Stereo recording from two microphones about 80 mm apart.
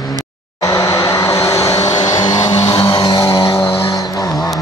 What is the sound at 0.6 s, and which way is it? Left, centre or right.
Vehicle, left.